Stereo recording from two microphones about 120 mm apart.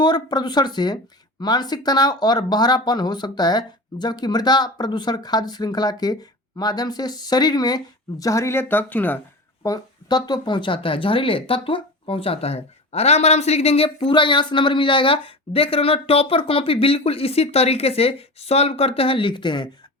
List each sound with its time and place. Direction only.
0.0 s speech: 35° left (ahead or behind); by 9.2 s 15° left (ahead or behind)
9.6 s speech: 35° left (ahead or behind)